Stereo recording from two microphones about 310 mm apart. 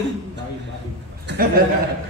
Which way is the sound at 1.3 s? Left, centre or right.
Right.